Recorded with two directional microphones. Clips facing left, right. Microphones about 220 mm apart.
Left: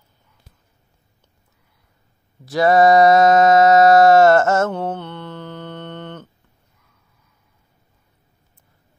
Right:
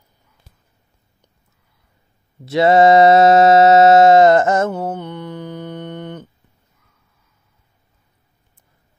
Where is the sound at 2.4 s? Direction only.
25° right (ahead or behind).